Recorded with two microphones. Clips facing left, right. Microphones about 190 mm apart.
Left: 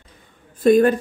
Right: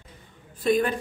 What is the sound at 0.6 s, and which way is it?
Speech, 50° left (ahead or behind).